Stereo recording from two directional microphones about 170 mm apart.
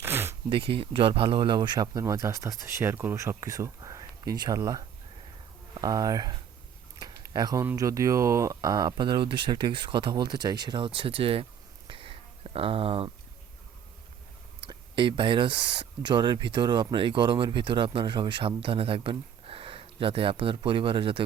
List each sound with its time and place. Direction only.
0.0 s zipper: 15° right (ahead or behind)
0.5 s speech: 35° right (ahead or behind)
5.8 s speech: 20° right (ahead or behind)
11.9 s a sound: 30° right (ahead or behind)
14.6 s speech: 30° right (ahead or behind)